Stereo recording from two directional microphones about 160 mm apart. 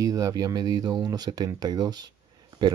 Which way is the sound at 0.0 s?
20° right (ahead or behind).